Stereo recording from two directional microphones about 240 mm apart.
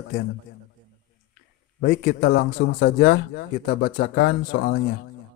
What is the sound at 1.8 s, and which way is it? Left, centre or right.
Speech, left.